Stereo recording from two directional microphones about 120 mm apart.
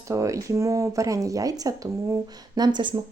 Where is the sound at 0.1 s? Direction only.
25° right (ahead or behind).